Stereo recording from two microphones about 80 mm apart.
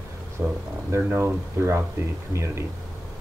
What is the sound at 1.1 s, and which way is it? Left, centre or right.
Speech, right.